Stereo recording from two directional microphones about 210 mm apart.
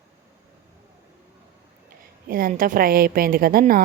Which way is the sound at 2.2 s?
45° right (ahead or behind).